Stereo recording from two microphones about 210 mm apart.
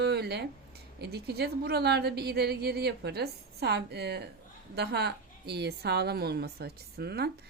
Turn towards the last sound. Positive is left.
turn(degrees=-50)  # may be behind; listen again after turning